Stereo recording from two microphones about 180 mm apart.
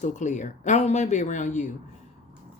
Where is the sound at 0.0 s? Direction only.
45° left (ahead or behind).